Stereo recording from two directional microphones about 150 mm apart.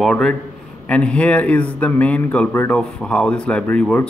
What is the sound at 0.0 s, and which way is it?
Speech, 5° left (ahead or behind).